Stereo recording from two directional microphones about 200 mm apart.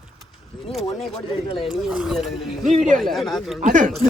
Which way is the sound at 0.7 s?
Centre (ahead or behind).